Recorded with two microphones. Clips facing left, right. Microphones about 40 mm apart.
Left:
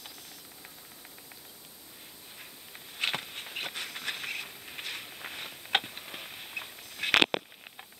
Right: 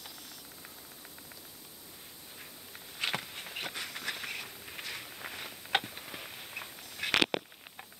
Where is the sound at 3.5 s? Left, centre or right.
Centre.